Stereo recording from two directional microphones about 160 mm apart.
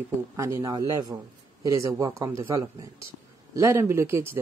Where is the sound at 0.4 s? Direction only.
20° right (ahead or behind).